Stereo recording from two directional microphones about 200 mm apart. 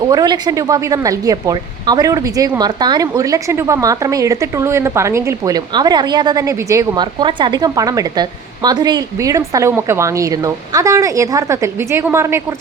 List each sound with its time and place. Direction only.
0.0 s a woman's voice: 20° right (ahead or behind)